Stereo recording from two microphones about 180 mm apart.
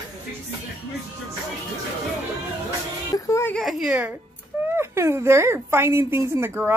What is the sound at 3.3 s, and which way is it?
Speech, 15° left (ahead or behind).